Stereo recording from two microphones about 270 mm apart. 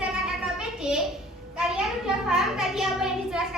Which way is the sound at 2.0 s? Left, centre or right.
Centre.